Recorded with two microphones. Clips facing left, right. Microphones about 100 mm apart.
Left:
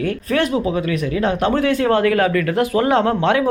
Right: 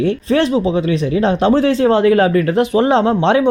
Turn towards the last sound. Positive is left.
turn(degrees=-25)  # may be behind; listen again after turning